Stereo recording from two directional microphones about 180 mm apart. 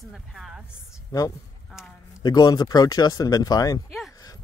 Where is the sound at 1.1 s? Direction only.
20° left (ahead or behind).